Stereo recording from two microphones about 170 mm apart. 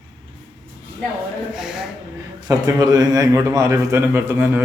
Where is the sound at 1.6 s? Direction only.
5° right (ahead or behind).